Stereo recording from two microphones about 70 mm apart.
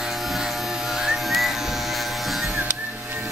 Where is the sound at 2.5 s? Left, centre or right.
Centre.